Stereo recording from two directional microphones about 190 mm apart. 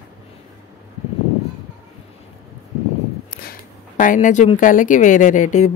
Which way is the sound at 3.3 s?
45° left (ahead or behind).